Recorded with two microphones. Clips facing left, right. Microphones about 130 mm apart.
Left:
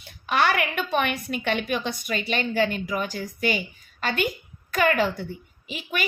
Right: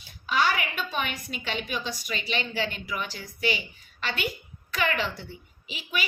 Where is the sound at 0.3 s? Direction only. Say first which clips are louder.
Left 3 dB; 60° left (ahead or behind).